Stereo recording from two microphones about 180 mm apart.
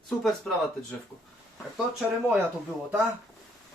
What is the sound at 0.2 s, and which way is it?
Speech, 5° left (ahead or behind).